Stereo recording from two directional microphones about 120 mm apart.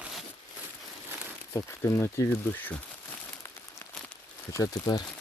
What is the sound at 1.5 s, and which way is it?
Speech, 20° left (ahead or behind).